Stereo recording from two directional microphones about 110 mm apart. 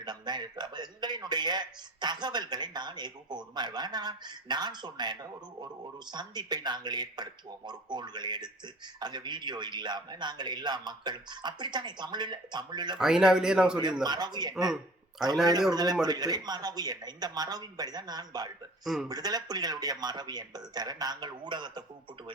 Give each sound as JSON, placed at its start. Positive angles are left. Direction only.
{"t": 0.0, "sound": "a man's voice", "side_deg": -40}
{"t": 13.0, "sound": "a man's voice", "side_deg": -5}
{"t": 14.0, "sound": "a man's voice", "side_deg": -40}
{"t": 15.7, "sound": "a man's voice", "side_deg": -35}